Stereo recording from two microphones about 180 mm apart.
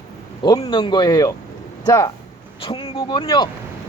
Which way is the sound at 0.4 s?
25° left (ahead or behind).